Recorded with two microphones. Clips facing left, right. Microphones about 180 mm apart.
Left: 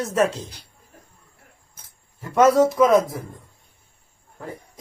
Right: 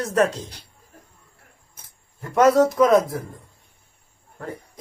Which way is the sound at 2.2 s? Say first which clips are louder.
Even; centre (ahead or behind).